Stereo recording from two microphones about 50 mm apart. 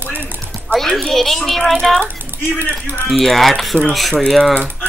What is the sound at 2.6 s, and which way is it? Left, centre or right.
Speech, right.